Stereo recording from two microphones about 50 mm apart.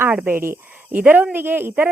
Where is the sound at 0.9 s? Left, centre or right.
Right.